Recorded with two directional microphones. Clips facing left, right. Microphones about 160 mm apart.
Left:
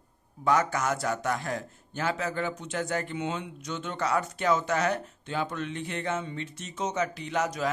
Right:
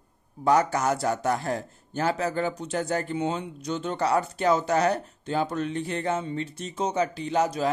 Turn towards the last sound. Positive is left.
turn(degrees=-30)  # may be behind; listen again after turning